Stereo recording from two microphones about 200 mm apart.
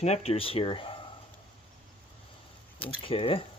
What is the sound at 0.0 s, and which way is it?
Speech, 30° left (ahead or behind).